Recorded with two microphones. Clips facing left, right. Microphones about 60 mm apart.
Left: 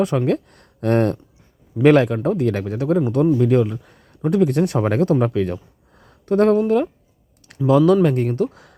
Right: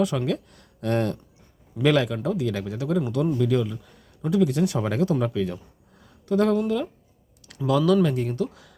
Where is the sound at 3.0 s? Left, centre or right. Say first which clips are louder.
Left 6 dB; left.